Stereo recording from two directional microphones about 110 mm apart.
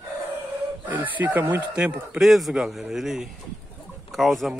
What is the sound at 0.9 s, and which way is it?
Speech, 15° right (ahead or behind).